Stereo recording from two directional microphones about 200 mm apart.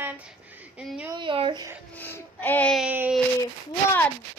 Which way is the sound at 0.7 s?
5° right (ahead or behind).